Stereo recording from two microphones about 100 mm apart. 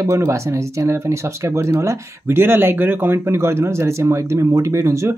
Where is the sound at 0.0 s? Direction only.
30° right (ahead or behind).